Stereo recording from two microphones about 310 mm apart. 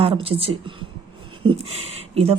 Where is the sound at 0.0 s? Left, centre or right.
Centre.